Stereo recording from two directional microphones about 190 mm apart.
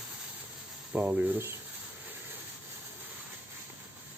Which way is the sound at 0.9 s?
10° right (ahead or behind).